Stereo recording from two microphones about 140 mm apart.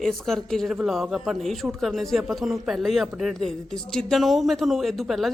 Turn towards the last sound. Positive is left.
turn(degrees=0)  # may be behind; listen again after turning